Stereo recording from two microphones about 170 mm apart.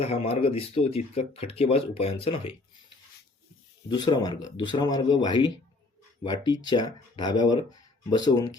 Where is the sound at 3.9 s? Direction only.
25° left (ahead or behind).